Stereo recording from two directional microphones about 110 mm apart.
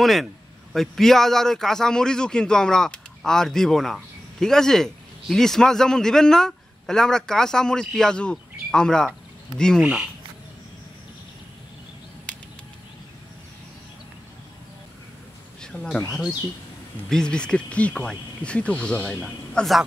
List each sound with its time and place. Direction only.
0.0 s a man's voice: centre (ahead or behind)
15.6 s a man's voice: 5° left (ahead or behind)